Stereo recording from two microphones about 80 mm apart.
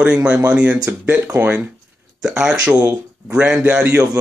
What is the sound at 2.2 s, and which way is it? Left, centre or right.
Speech, centre.